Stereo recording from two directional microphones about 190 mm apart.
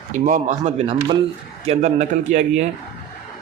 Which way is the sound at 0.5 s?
30° right (ahead or behind).